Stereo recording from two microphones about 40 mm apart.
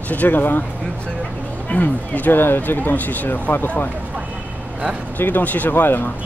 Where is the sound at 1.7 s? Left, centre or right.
Left.